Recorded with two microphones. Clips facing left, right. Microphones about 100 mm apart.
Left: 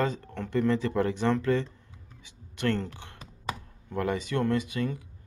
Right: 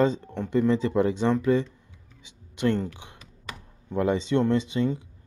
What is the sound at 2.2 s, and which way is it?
Computer keyboard, 20° right (ahead or behind).